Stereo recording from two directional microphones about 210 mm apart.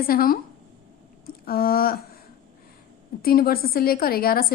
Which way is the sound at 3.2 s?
45° left (ahead or behind).